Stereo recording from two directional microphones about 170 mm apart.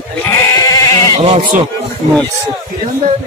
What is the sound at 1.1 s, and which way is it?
Speech, 40° right (ahead or behind).